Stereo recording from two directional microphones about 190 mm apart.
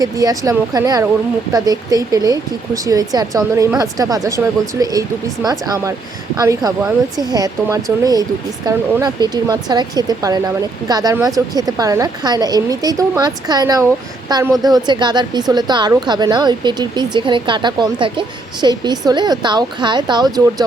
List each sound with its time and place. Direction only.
0.0 s a woman's voice: 20° right (ahead or behind)